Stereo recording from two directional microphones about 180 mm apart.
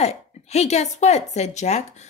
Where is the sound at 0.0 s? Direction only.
35° left (ahead or behind).